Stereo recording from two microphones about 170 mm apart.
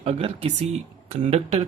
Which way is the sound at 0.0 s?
35° right (ahead or behind).